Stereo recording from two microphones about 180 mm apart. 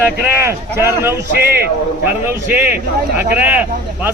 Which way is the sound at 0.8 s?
15° right (ahead or behind).